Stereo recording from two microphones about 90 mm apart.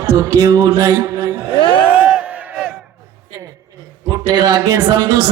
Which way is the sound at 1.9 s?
15° right (ahead or behind).